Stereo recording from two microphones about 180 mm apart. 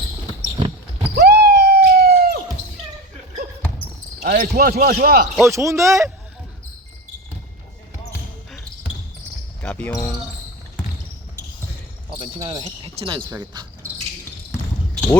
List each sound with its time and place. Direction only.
0.5 s basketball bounce: 25° right (ahead or behind)
1.1 s basketball bounce: 65° right (ahead or behind)
4.2 s speech: 50° right (ahead or behind)
5.5 s speech: 15° right (ahead or behind)
9.6 s basketball bounce: 10° left (ahead or behind)
9.9 s speech: 15° left (ahead or behind)
12.2 s cricket: 30° right (ahead or behind)